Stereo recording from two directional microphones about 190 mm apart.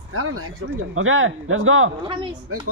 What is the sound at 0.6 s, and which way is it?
Speech, 90° right.